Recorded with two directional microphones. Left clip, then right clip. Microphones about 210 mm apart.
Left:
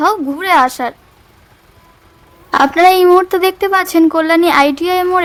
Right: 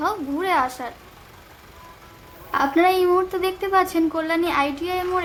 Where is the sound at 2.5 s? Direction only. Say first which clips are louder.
Left 10 dB; 45° left (ahead or behind).